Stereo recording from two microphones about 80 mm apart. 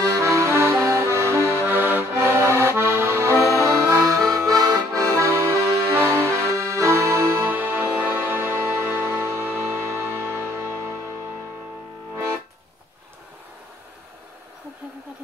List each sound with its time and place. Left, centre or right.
0.0 s accordion: right
3.4 s music: right
4.4 s accordion: right